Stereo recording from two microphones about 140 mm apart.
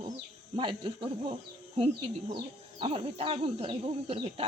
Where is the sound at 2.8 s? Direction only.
45° right (ahead or behind).